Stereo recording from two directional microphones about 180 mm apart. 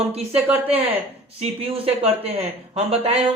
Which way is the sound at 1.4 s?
30° right (ahead or behind).